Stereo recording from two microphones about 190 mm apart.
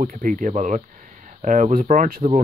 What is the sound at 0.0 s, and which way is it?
Speech, 45° right (ahead or behind).